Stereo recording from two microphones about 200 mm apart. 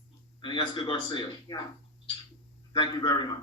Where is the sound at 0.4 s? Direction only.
25° left (ahead or behind).